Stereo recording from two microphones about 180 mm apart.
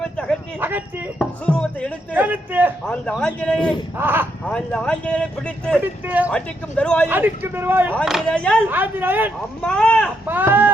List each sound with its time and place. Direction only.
0.0 s a sound: 5° left (ahead or behind)
0.6 s speech: 10° right (ahead or behind)
1.2 s speech: 5° left (ahead or behind)
2.1 s speech: 10° right (ahead or behind)
2.8 s a man's voice: 5° left (ahead or behind)
3.9 s speech: 10° right (ahead or behind)
4.4 s speech: 5° left (ahead or behind)
5.8 s speech: 10° right (ahead or behind)
6.3 s a man's voice: 5° left (ahead or behind)
7.1 s speech: 10° right (ahead or behind)
7.9 s a man's voice: centre (ahead or behind)
8.7 s speech: 10° right (ahead or behind)
9.6 s a man's voice: 5° left (ahead or behind)
10.2 s speech: 10° right (ahead or behind)